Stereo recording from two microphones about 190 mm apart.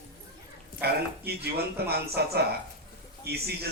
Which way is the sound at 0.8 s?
55° right (ahead or behind).